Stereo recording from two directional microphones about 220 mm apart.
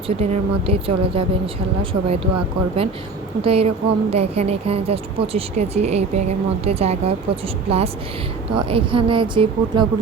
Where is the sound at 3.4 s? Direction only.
25° right (ahead or behind).